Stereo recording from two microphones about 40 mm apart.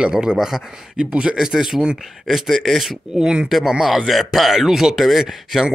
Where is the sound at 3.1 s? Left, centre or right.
Centre.